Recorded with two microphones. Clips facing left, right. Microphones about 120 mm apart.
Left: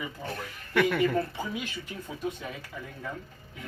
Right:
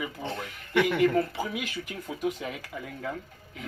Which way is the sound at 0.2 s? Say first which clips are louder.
Right 2 dB; 15° right (ahead or behind).